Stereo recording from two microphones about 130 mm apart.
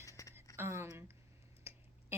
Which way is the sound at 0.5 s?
20° right (ahead or behind).